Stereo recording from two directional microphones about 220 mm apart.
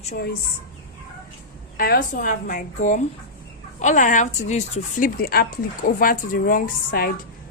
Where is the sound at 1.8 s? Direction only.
40° left (ahead or behind).